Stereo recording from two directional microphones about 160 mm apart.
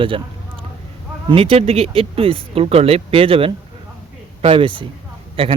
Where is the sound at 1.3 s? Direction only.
35° right (ahead or behind).